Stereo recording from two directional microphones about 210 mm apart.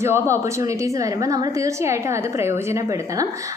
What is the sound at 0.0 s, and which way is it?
A woman's voice, 15° right (ahead or behind).